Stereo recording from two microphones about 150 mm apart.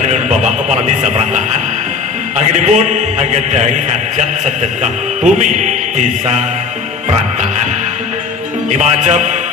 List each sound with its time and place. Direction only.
0.1 s radio: 50° right (ahead or behind)
2.5 s music: 55° right (ahead or behind)
8.7 s music: 50° right (ahead or behind)